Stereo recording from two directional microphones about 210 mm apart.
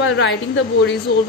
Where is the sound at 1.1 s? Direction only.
50° left (ahead or behind).